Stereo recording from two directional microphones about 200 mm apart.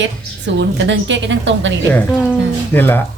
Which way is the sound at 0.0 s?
65° right (ahead or behind).